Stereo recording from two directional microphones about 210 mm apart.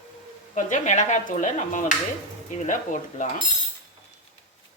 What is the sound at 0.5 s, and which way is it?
Speech, 35° left (ahead or behind).